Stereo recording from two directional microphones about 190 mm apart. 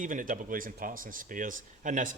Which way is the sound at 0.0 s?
45° right (ahead or behind).